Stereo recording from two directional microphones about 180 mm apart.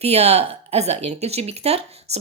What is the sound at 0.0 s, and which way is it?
Speech, 35° right (ahead or behind).